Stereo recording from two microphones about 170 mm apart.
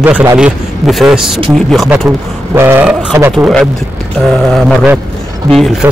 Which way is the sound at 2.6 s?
15° right (ahead or behind).